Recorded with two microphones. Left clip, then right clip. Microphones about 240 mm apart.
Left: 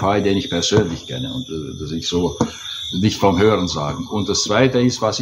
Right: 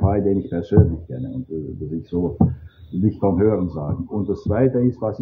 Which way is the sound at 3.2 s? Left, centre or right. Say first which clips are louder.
Left 4 dB; centre.